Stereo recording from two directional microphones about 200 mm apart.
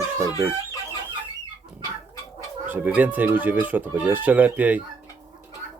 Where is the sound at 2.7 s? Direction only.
10° right (ahead or behind).